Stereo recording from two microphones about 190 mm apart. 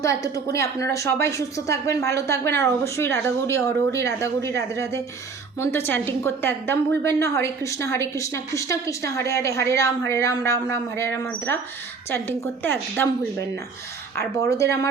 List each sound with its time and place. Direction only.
0.0 s a woman's voice: 15° left (ahead or behind)
14.2 s a woman's voice: 15° left (ahead or behind)